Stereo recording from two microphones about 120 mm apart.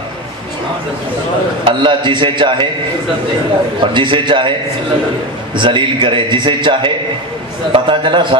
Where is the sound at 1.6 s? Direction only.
45° right (ahead or behind).